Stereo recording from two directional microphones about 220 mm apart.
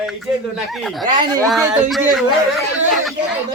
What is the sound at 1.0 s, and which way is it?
Speech, 20° right (ahead or behind).